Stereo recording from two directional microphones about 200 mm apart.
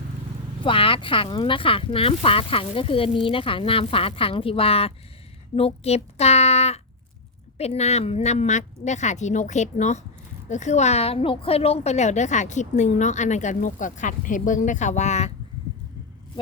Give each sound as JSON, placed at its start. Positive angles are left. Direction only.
{"t": 0.6, "sound": "a woman's voice", "side_deg": 25}